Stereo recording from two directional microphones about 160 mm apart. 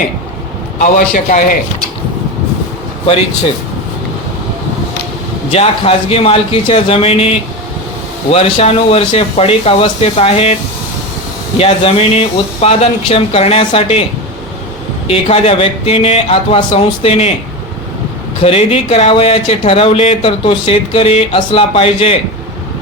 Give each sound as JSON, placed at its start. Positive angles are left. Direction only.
{"t": 0.8, "sound": "a man's voice", "side_deg": 55}
{"t": 5.5, "sound": "speech", "side_deg": 40}
{"t": 8.3, "sound": "speech", "side_deg": 40}
{"t": 15.0, "sound": "speech", "side_deg": 40}
{"t": 18.4, "sound": "speech", "side_deg": 40}